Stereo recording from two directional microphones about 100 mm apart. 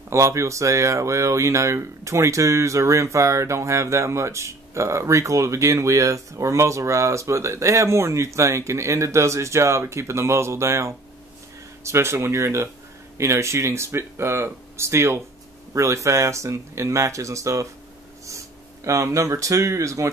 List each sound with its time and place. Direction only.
0.1 s speech: 30° right (ahead or behind)
18.9 s speech: 30° right (ahead or behind)